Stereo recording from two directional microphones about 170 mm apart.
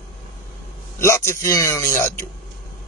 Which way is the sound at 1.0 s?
15° left (ahead or behind).